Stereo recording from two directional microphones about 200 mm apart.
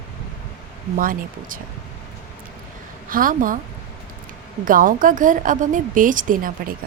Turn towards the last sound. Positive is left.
turn(degrees=-45)  # may be behind; listen again after turning